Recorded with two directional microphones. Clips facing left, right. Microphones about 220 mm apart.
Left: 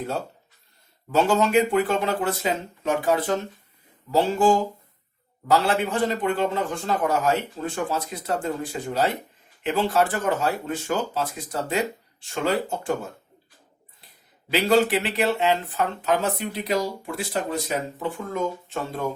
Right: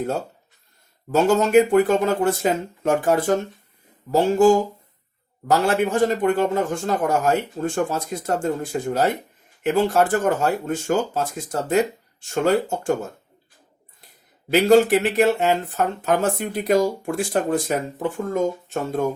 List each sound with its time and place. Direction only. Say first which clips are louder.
1.1 s speech: right 4 dB; 45° right (ahead or behind)
5.5 s speech: right 3 dB; 45° right (ahead or behind)
14.5 s speech: right 5 dB; 45° right (ahead or behind)